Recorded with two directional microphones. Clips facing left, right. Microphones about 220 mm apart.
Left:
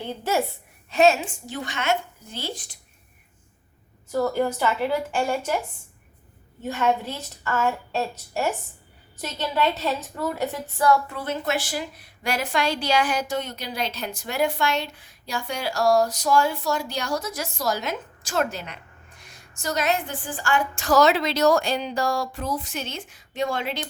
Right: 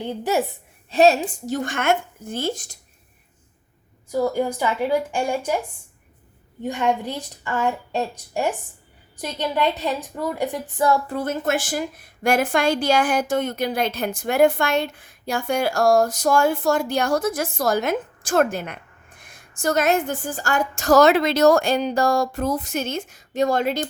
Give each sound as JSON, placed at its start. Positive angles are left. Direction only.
{"t": 0.0, "sound": "a woman's voice", "side_deg": -15}
{"t": 0.9, "sound": "a woman's voice", "side_deg": -35}
{"t": 4.1, "sound": "a woman's voice", "side_deg": -10}
{"t": 6.6, "sound": "a woman's voice", "side_deg": -15}
{"t": 11.1, "sound": "a woman's voice", "side_deg": -45}